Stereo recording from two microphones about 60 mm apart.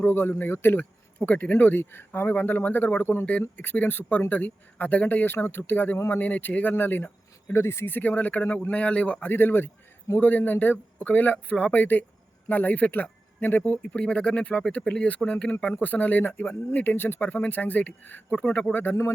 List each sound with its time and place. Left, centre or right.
0.0 s speech: left
7.5 s speech: left
7.9 s speech: left
9.3 s speech: left